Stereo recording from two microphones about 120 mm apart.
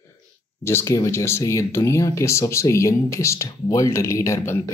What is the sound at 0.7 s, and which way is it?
Speech, 25° left (ahead or behind).